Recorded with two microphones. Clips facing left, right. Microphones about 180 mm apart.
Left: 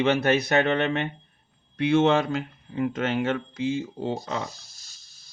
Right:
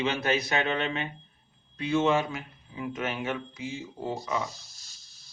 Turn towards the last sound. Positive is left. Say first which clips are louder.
# left 3 dB
turn(degrees=65)  # may be behind; listen again after turning